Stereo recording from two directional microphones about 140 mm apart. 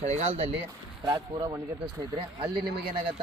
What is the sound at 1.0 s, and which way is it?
Speech, 30° right (ahead or behind).